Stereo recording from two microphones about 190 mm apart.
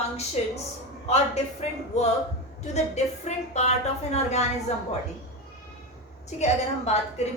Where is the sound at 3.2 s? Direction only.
35° left (ahead or behind).